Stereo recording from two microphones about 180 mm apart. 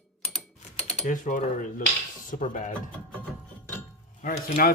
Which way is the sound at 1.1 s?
45° left (ahead or behind).